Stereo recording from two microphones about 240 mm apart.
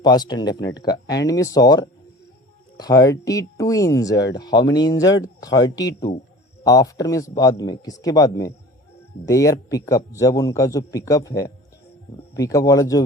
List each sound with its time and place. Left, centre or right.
0.0 s a man's voice: centre